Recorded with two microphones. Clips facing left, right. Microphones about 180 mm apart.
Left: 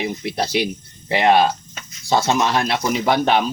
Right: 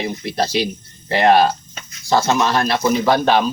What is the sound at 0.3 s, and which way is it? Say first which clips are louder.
Speech: right 3 dB; 15° left (ahead or behind).